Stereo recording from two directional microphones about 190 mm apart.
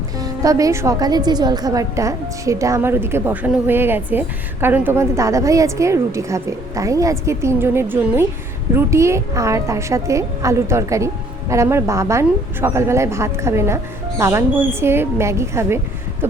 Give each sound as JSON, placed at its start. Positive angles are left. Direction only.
{"t": 0.2, "sound": "a woman's voice", "side_deg": -15}